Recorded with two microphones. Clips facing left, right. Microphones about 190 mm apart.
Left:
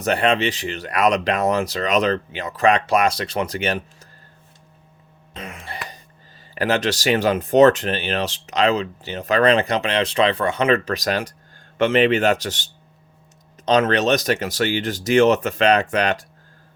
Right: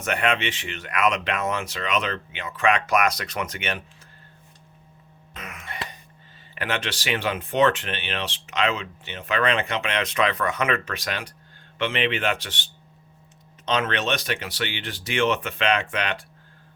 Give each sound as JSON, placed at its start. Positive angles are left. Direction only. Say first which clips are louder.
{"t": 0.0, "sound": "speech", "louder": "left 6 dB", "side_deg": 35}
{"t": 5.3, "sound": "throat clearing", "louder": "left 4 dB", "side_deg": 30}
{"t": 6.5, "sound": "speech", "louder": "left 8 dB", "side_deg": 40}